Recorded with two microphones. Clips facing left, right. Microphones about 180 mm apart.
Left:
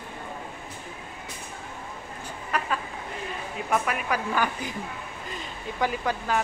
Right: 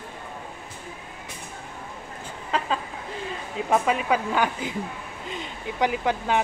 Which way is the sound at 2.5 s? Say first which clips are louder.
Right 3 dB; 25° right (ahead or behind).